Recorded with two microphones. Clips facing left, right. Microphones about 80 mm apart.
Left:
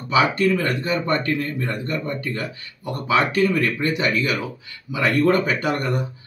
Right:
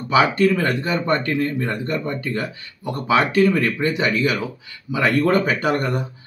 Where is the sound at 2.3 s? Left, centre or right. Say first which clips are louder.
Right 3 dB; right.